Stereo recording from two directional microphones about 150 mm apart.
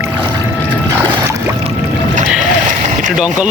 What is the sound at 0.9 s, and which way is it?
Boat, 30° right (ahead or behind).